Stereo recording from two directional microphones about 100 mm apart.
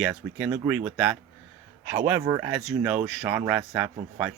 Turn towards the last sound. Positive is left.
turn(degrees=-10)  # may be behind; listen again after turning